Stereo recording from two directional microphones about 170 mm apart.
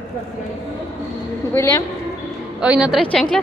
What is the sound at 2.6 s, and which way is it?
Speech, 5° right (ahead or behind).